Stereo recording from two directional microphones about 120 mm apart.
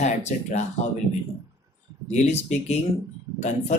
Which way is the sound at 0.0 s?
70° left (ahead or behind).